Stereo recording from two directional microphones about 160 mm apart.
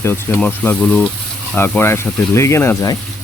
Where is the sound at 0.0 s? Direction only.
15° left (ahead or behind).